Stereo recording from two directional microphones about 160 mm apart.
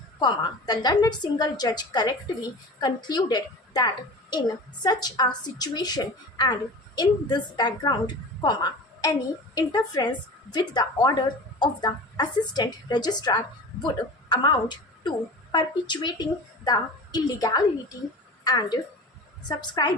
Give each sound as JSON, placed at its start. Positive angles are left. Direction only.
{"t": 0.2, "sound": "a woman's voice", "side_deg": 25}